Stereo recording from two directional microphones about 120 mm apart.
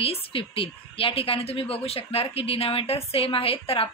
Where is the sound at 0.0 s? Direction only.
50° left (ahead or behind).